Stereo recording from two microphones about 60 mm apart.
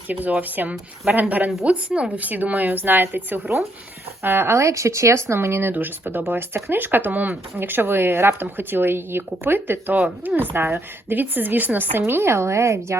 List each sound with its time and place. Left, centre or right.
0.1 s speech: right
1.9 s speech: centre
4.2 s speech: right
5.7 s speech: right
7.7 s speech: right